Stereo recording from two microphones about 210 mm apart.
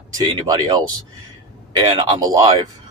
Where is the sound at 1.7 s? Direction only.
20° right (ahead or behind).